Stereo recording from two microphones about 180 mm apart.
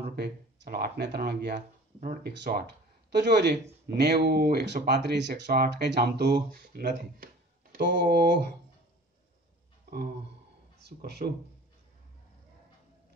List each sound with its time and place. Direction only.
0.1 s speech: 65° right (ahead or behind)
2.3 s speech: 70° right (ahead or behind)
10.8 s a man's voice: 65° right (ahead or behind)